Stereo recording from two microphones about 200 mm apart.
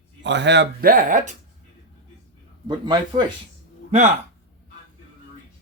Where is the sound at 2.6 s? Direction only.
20° right (ahead or behind).